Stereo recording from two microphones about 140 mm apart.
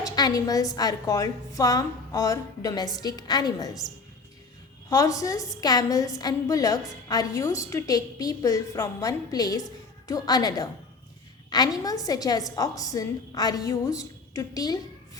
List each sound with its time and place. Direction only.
0.0 s a woman's voice: 25° left (ahead or behind)